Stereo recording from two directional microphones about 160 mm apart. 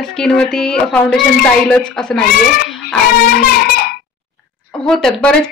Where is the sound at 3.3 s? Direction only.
70° left (ahead or behind).